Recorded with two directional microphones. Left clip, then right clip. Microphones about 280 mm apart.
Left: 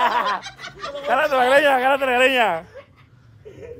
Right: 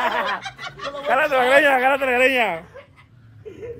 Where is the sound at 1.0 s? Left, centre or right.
Centre.